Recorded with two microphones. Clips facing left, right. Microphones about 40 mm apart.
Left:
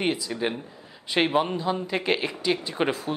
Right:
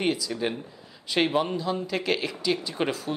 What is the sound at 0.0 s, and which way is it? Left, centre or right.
Speech, centre.